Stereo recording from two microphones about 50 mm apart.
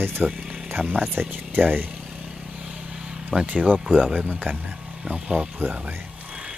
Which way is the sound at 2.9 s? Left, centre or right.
Centre.